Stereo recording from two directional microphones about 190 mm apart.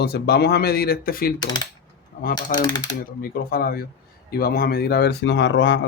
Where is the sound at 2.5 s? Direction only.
20° left (ahead or behind).